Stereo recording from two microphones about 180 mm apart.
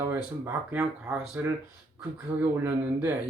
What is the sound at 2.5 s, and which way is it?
Speech, 15° right (ahead or behind).